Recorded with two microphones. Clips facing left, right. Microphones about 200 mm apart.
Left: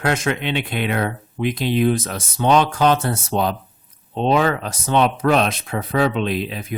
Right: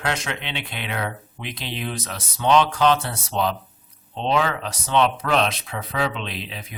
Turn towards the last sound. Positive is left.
turn(degrees=50)  # may be behind; listen again after turning